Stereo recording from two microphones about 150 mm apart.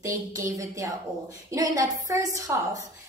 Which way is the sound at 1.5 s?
25° right (ahead or behind).